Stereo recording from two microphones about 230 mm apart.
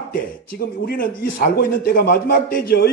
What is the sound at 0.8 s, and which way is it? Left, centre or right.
A man's voice, left.